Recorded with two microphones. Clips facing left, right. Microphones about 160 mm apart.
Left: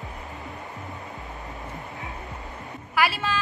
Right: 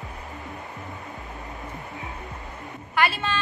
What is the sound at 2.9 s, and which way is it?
Speech, 5° left (ahead or behind).